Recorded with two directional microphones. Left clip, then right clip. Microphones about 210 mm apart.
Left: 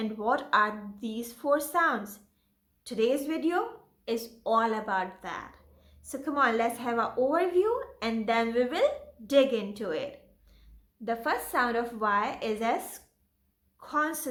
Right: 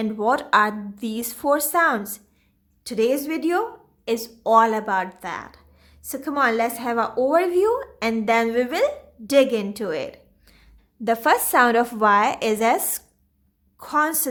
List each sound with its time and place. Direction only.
0.0 s a woman's voice: 40° right (ahead or behind)